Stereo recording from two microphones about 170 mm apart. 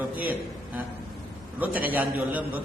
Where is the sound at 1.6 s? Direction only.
10° right (ahead or behind).